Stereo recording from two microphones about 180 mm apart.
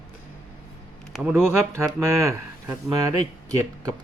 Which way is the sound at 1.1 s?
10° right (ahead or behind).